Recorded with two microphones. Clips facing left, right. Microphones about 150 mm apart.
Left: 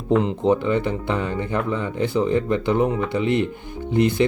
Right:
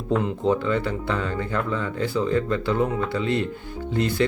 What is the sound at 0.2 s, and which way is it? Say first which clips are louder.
Speech: left 3 dB; 20° left (ahead or behind).